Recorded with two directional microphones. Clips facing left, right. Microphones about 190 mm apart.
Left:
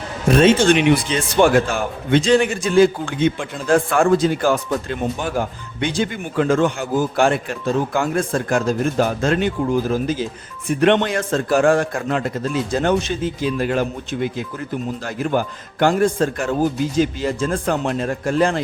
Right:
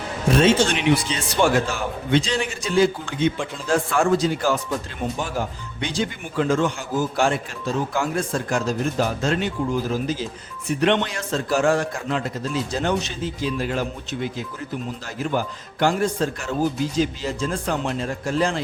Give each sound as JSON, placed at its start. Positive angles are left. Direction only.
{"t": 0.3, "sound": "speech", "side_deg": 55}